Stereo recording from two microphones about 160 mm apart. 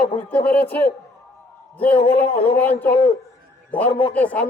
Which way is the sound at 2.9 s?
35° left (ahead or behind).